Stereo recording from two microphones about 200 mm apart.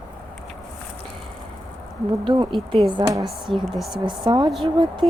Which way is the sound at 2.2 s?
25° right (ahead or behind).